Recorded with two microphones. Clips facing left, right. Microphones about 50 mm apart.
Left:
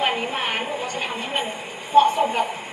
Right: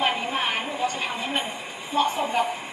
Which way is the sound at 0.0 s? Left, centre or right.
Left.